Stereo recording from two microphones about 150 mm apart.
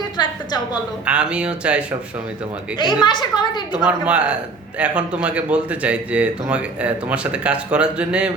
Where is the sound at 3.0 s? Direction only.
30° left (ahead or behind).